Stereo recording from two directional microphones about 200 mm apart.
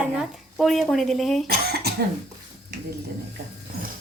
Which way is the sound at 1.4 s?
50° right (ahead or behind).